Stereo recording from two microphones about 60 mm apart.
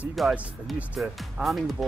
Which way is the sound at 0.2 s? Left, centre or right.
Centre.